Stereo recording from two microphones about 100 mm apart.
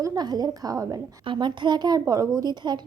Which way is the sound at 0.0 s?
40° right (ahead or behind).